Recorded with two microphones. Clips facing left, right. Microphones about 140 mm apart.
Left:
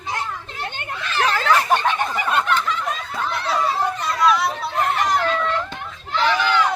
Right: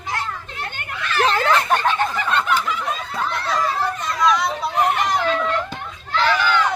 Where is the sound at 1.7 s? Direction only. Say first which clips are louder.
Right 1 dB; 15° left (ahead or behind).